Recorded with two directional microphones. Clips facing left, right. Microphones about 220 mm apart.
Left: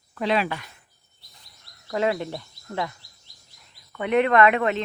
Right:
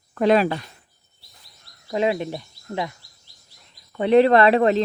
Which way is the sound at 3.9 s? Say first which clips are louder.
Right 5 dB; 30° right (ahead or behind).